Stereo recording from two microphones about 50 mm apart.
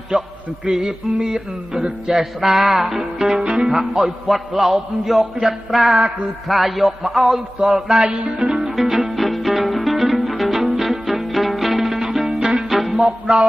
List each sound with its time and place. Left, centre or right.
0.1 s music: centre
0.7 s a sound: centre
2.9 s a sound: centre
8.0 s music: right
8.5 s music: centre
10.6 s zither: centre
11.8 s music: centre